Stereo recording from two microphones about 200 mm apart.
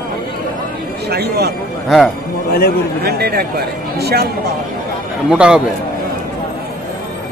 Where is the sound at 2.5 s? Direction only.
50° left (ahead or behind).